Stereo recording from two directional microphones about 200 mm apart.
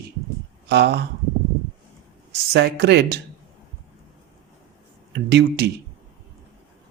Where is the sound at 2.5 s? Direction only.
55° right (ahead or behind).